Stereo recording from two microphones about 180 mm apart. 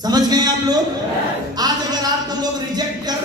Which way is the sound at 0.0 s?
20° right (ahead or behind).